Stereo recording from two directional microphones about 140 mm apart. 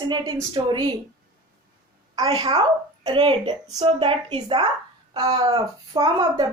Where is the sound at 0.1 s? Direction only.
30° right (ahead or behind).